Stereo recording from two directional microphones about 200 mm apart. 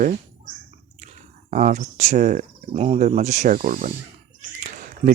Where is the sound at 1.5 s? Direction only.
40° right (ahead or behind).